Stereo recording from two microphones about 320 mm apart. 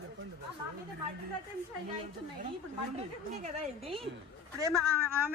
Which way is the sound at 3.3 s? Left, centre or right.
Right.